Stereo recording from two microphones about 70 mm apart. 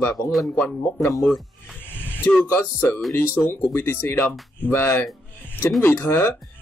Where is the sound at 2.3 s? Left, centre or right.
Left.